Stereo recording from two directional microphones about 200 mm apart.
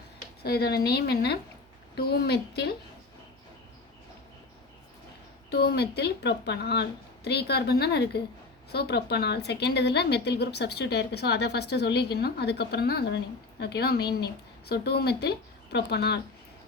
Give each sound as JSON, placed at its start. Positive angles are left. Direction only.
{"t": 0.4, "sound": "a woman's voice", "side_deg": 55}
{"t": 5.5, "sound": "a woman's voice", "side_deg": 55}